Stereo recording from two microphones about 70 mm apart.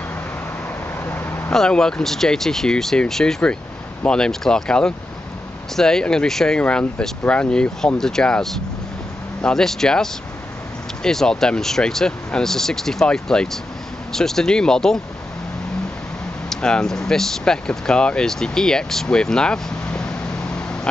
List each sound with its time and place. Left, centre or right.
1.0 s vehicle: left
1.5 s speech: centre
6.6 s speech: centre
16.4 s speech: centre